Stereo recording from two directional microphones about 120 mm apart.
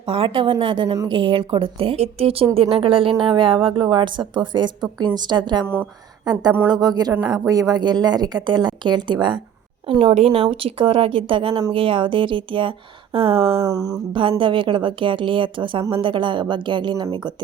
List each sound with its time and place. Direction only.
0.0 s a woman's voice: 45° right (ahead or behind)
5.6 s speech: 15° right (ahead or behind)
6.3 s a woman's voice: 35° right (ahead or behind)
9.8 s a woman's voice: 50° right (ahead or behind)
13.6 s a sound: 30° right (ahead or behind)
14.1 s a woman's voice: 45° right (ahead or behind)